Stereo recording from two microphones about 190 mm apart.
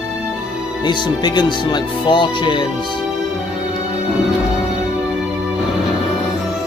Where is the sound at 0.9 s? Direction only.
25° left (ahead or behind).